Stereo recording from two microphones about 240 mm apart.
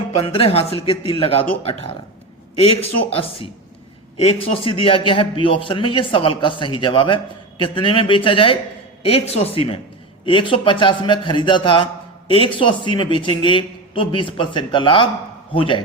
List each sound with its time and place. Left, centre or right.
0.1 s a man's voice: left
3.1 s a man's voice: left